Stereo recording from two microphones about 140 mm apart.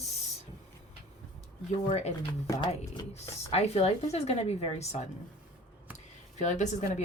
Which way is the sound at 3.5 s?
45° left (ahead or behind).